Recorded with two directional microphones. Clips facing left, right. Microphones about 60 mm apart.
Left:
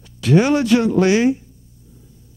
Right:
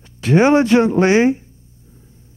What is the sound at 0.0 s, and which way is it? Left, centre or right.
Speech, right.